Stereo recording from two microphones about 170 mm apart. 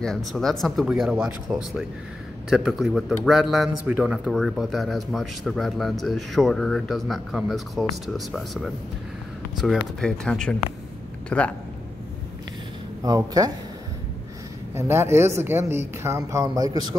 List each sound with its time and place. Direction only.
0.0 s speech: 5° left (ahead or behind)
13.0 s speech: 20° right (ahead or behind)
14.8 s speech: 15° right (ahead or behind)